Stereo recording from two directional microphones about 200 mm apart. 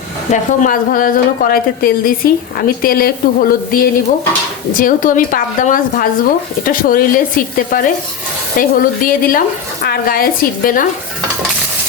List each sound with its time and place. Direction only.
0.3 s a woman's voice: 40° left (ahead or behind)